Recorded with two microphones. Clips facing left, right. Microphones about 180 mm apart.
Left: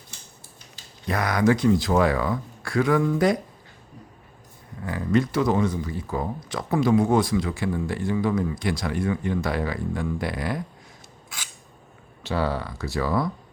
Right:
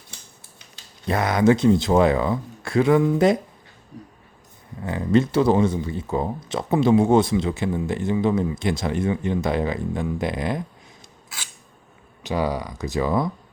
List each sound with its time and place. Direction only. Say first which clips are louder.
1.0 s speech: right 3 dB; 25° right (ahead or behind)
4.8 s speech: right 3 dB; 25° right (ahead or behind)
12.2 s speech: right 2 dB; 15° right (ahead or behind)